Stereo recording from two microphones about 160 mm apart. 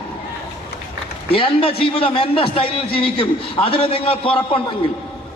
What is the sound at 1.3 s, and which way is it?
A man's voice, 35° left (ahead or behind).